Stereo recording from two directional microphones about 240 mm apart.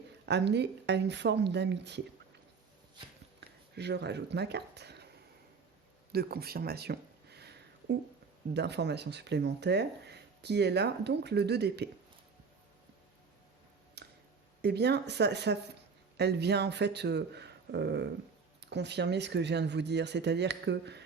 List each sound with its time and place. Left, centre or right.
0.3 s speech: right
3.8 s speech: right
6.1 s a sound: right
8.5 s speech: right
14.0 s a sound: right
14.6 s speech: right